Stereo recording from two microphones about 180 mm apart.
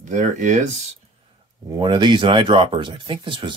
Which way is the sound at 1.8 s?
25° right (ahead or behind).